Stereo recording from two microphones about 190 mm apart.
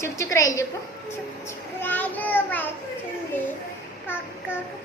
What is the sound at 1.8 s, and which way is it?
Child singing, 10° left (ahead or behind).